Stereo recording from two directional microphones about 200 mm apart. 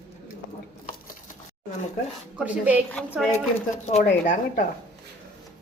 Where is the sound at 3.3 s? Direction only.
35° left (ahead or behind).